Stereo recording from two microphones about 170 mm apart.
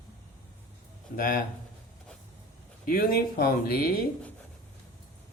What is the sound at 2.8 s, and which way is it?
Speech, 60° left (ahead or behind).